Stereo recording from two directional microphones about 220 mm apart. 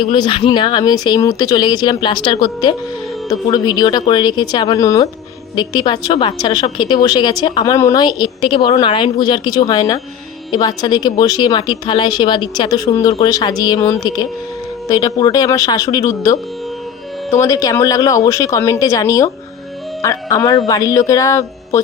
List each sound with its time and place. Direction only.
0.0 s a woman's voice: 20° left (ahead or behind)